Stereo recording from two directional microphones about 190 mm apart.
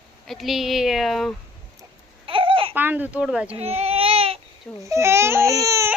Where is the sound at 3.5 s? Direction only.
30° right (ahead or behind).